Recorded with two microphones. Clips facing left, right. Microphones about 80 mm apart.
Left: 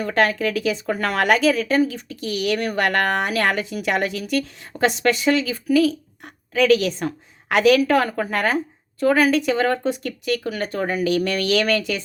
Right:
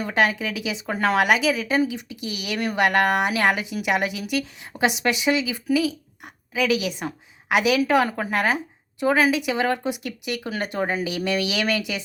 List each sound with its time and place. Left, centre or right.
0.0 s a woman's voice: centre